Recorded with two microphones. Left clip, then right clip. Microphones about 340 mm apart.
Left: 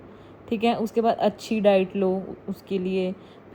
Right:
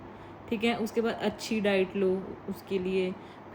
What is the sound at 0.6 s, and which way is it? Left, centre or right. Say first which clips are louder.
Speech: left 7 dB; centre.